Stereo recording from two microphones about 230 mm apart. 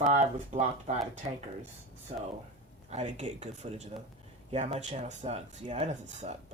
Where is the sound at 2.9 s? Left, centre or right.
Right.